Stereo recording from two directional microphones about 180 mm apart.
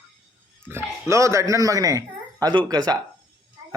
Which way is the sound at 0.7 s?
15° right (ahead or behind).